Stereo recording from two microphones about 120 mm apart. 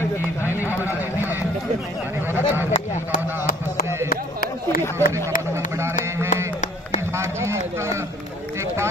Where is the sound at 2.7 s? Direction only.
90° left.